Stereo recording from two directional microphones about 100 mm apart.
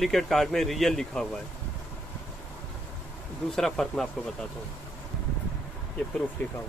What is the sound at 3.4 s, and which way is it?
Speech, 5° left (ahead or behind).